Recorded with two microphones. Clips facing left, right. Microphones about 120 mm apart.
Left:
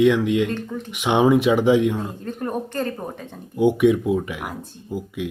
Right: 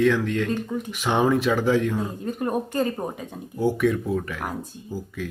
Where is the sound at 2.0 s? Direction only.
5° right (ahead or behind).